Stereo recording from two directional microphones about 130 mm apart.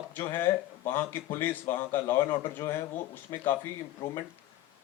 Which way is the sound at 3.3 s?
25° left (ahead or behind).